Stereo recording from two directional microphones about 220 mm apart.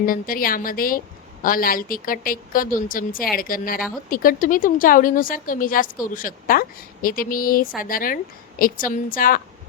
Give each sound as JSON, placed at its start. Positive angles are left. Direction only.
{"t": 0.0, "sound": "a woman's voice", "side_deg": 40}